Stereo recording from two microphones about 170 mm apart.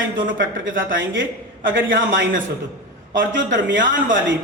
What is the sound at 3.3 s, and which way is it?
Speech, 90° right.